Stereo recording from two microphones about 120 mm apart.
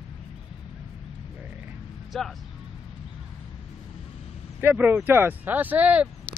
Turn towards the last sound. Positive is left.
turn(degrees=-10)  # may be behind; listen again after turning